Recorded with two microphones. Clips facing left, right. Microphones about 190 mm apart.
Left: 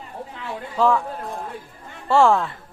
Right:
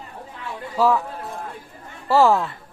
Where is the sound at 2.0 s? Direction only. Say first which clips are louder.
Even; centre (ahead or behind).